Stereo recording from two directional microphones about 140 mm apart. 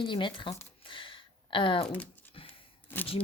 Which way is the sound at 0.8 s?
35° left (ahead or behind).